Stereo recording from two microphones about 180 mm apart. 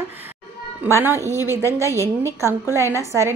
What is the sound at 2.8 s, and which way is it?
Speech, 15° left (ahead or behind).